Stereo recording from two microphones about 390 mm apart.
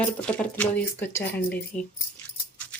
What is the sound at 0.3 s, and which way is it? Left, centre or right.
Speech, centre.